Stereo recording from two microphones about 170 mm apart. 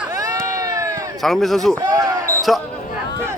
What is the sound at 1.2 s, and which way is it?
Speech, centre (ahead or behind).